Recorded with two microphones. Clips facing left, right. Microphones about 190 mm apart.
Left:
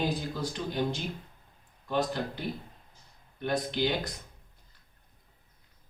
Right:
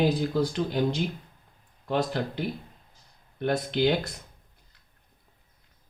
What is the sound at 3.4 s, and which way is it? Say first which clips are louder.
Speech: right 5 dB; 65° right (ahead or behind).